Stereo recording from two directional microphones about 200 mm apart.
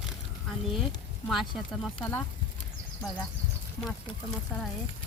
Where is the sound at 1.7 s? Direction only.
Centre (ahead or behind).